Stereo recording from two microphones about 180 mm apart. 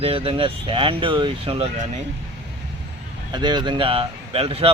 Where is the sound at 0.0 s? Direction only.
30° right (ahead or behind).